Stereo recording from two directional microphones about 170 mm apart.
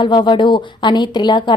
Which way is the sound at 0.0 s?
25° left (ahead or behind).